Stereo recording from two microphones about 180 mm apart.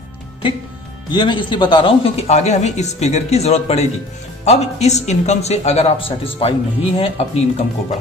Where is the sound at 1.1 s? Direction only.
25° left (ahead or behind).